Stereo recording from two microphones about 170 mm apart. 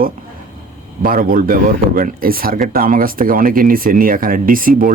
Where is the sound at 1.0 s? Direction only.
55° right (ahead or behind).